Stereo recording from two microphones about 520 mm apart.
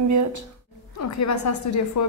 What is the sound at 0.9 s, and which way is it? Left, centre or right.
A woman's voice, left.